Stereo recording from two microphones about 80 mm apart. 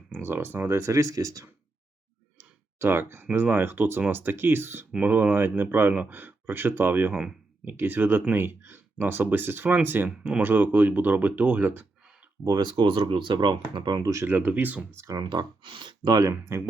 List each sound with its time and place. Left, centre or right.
0.1 s speech: right
2.7 s speech: right
12.5 s speech: right
14.0 s speech: right
14.3 s speech: right
14.9 s speech: right
15.2 s speech: right
16.3 s speech: right